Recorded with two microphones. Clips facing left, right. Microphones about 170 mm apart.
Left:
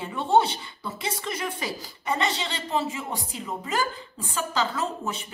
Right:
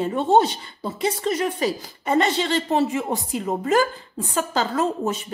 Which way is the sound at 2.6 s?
55° right (ahead or behind).